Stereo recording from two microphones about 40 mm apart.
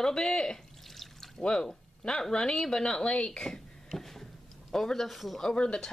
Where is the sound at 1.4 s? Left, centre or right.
Left.